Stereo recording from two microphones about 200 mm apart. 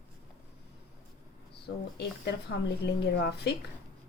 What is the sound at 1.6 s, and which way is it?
Speech, 55° left (ahead or behind).